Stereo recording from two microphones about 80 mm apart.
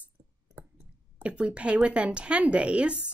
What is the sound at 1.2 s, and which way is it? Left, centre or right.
A woman's voice, centre.